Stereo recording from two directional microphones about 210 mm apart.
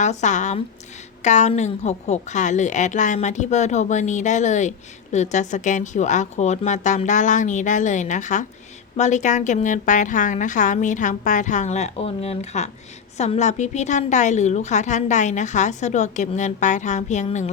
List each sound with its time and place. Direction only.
0.0 s a woman's voice: 35° left (ahead or behind)